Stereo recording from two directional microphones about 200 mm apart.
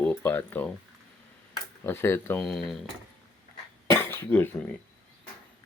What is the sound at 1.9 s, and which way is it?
Speech, 10° left (ahead or behind).